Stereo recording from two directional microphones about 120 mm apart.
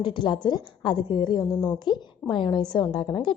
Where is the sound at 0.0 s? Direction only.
40° left (ahead or behind).